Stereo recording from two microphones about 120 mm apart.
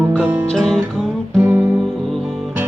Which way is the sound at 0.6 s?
Centre (ahead or behind).